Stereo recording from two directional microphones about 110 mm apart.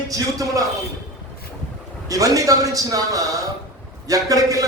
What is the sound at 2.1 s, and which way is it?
A man's voice, 30° right (ahead or behind).